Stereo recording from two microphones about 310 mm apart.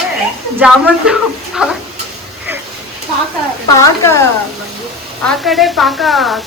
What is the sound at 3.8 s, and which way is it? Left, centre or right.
Speech, centre.